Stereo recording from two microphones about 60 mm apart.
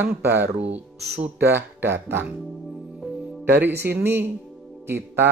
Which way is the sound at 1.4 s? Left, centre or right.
Right.